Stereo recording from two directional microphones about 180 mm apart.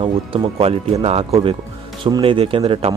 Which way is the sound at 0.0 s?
30° right (ahead or behind).